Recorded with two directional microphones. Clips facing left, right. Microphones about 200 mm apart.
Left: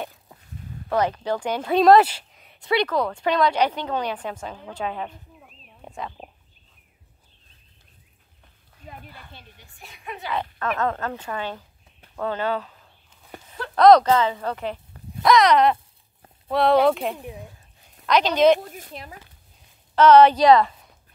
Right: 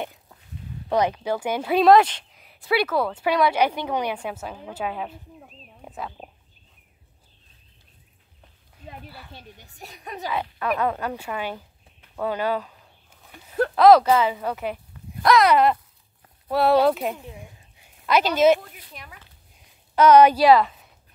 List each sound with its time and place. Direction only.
0.8 s speech: 15° right (ahead or behind)
9.6 s a woman's voice: 40° right (ahead or behind)
10.3 s speech: 10° right (ahead or behind)
13.3 s a sound: 45° left (ahead or behind)
13.7 s speech: 5° right (ahead or behind)
17.4 s a sound: 10° right (ahead or behind)
18.7 s speech: 45° left (ahead or behind)
20.0 s speech: 10° right (ahead or behind)